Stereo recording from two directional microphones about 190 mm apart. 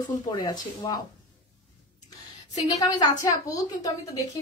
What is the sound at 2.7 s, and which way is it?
A woman's voice, 20° left (ahead or behind).